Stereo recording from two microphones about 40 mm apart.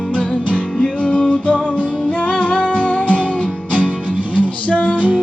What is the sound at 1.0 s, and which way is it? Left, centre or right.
Music, left.